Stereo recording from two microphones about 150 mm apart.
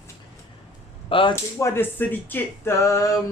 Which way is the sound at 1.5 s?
20° left (ahead or behind).